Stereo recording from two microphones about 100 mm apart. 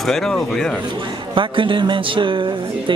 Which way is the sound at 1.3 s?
55° right (ahead or behind).